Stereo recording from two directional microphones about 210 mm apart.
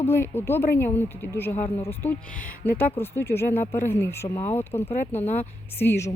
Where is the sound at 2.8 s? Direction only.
10° left (ahead or behind).